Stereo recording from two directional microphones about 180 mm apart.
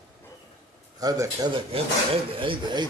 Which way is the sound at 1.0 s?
20° right (ahead or behind).